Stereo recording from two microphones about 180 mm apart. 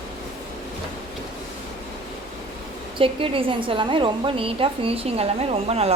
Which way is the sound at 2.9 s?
30° right (ahead or behind).